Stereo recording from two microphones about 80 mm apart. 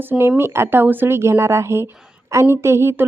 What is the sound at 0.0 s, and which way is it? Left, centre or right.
Speech, right.